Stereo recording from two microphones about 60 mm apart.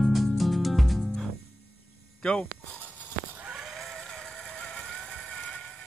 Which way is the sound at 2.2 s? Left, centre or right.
Centre.